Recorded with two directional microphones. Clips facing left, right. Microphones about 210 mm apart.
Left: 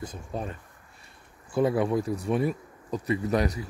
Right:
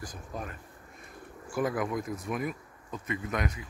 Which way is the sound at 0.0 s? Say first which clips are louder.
Left 5 dB; 25° left (ahead or behind).